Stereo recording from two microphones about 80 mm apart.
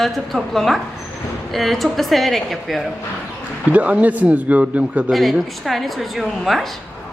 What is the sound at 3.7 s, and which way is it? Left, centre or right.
Speech, centre.